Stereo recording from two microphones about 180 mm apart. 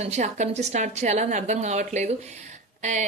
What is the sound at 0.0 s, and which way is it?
A woman's voice, 40° right (ahead or behind).